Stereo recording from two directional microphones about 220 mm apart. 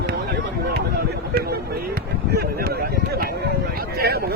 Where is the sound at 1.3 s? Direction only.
45° right (ahead or behind).